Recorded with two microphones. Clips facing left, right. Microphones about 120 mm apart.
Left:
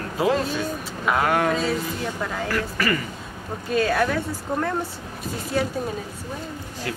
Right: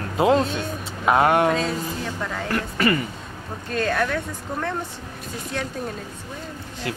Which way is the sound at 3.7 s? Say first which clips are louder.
Left 2 dB; 5° left (ahead or behind).